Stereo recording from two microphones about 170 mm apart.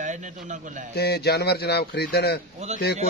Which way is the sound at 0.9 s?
75° left (ahead or behind).